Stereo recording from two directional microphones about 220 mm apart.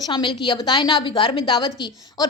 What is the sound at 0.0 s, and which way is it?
A woman's voice, 20° left (ahead or behind).